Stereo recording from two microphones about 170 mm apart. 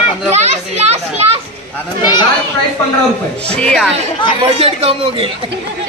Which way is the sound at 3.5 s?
5° left (ahead or behind).